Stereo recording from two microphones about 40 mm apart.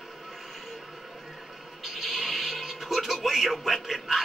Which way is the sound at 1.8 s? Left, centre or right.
Centre.